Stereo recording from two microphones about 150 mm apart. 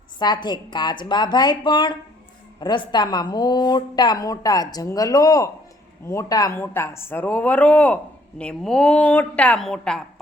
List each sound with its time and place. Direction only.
0.2 s a woman's voice: 30° left (ahead or behind); by 10.0 s 5° left (ahead or behind)